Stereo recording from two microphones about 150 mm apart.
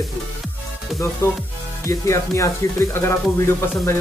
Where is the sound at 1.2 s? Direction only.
20° left (ahead or behind).